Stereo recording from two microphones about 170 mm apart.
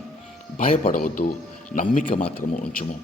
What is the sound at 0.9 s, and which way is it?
Speech, 30° left (ahead or behind).